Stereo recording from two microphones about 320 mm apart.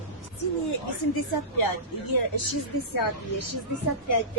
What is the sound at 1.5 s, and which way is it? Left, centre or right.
Speech, left.